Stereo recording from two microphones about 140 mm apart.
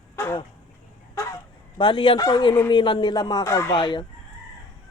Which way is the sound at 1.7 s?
35° left (ahead or behind).